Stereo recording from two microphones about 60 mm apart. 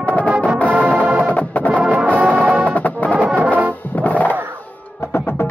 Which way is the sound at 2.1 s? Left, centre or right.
Right.